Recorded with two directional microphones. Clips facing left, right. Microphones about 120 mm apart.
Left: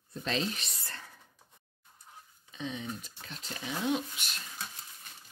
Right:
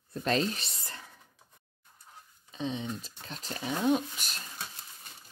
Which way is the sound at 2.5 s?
30° right (ahead or behind).